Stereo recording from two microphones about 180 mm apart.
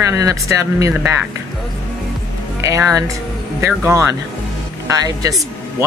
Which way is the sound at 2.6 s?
20° right (ahead or behind).